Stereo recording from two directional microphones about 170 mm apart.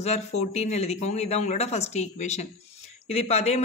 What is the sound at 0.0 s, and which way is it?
Speech, 40° left (ahead or behind).